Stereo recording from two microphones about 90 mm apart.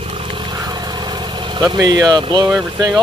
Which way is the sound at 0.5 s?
50° right (ahead or behind).